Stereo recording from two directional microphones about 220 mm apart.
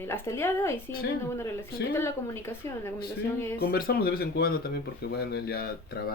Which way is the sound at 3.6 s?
45° left (ahead or behind).